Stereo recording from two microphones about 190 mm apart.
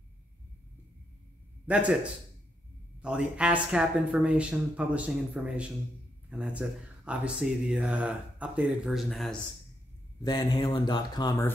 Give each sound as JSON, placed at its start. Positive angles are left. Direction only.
{"t": 1.7, "sound": "a man's voice", "side_deg": -5}
{"t": 3.0, "sound": "speech", "side_deg": -5}
{"t": 10.2, "sound": "mantra", "side_deg": 20}